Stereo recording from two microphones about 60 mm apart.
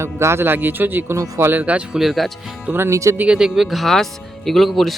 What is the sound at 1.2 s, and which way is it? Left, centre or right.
Speech, right.